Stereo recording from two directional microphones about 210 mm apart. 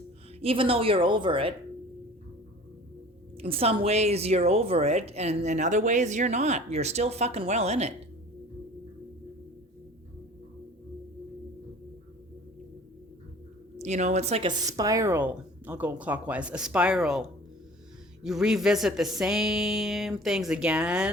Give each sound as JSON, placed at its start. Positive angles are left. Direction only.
{"t": 0.4, "sound": "a woman's voice", "side_deg": -25}
{"t": 3.3, "sound": "a woman's voice", "side_deg": -25}
{"t": 13.7, "sound": "a woman's voice", "side_deg": -35}
{"t": 14.7, "sound": "speech", "side_deg": -15}